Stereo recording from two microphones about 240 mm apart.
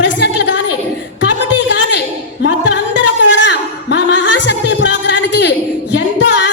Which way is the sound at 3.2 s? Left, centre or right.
Left.